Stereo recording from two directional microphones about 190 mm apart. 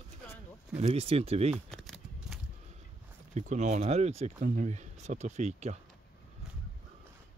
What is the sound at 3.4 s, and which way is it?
Speech, 40° right (ahead or behind).